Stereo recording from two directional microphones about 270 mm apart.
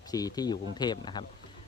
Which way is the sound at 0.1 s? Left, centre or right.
Centre.